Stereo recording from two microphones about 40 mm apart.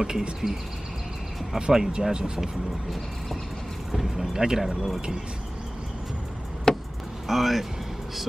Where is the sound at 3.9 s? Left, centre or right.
Centre.